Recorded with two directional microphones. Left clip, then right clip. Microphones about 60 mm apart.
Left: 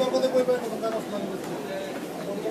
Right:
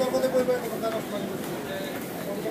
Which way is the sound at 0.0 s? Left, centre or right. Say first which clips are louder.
Left 1 dB; left.